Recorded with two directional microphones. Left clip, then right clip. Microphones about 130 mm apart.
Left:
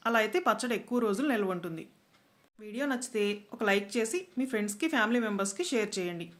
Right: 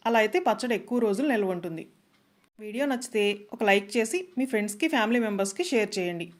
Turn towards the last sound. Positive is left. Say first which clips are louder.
# right 5 dB
turn(degrees=-45)  # may be behind; listen again after turning